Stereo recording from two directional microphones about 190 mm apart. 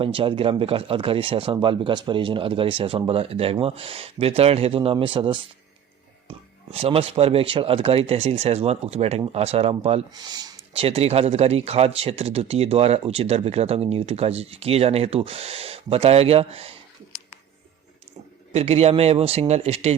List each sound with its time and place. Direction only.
0.0 s speech: 30° right (ahead or behind)
10.2 s speech: 20° right (ahead or behind)
18.5 s speech: 35° right (ahead or behind)